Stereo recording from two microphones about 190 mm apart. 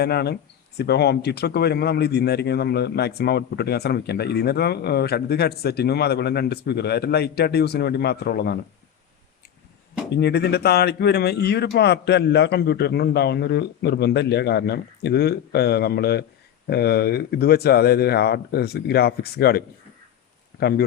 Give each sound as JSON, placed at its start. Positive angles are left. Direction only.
{"t": 0.0, "sound": "speech", "side_deg": 60}
{"t": 10.1, "sound": "speech", "side_deg": 60}